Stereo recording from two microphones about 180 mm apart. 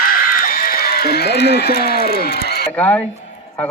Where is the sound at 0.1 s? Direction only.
55° left (ahead or behind).